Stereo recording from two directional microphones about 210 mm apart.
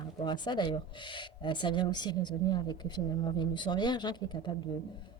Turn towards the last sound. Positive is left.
turn(degrees=20)  # may be behind; listen again after turning